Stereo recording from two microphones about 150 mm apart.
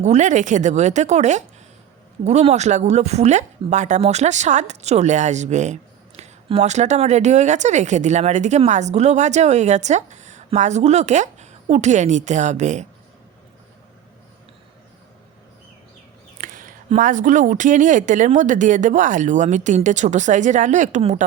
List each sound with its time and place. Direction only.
0.0 s speech: 50° right (ahead or behind)
16.4 s speech: 65° right (ahead or behind)